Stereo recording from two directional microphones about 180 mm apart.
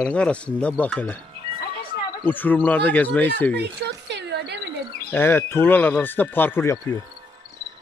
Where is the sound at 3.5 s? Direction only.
70° right (ahead or behind).